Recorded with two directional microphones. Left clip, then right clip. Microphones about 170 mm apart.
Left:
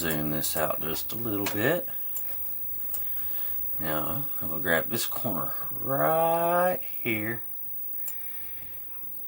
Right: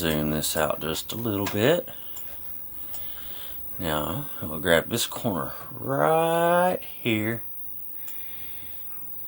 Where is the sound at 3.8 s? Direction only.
40° right (ahead or behind).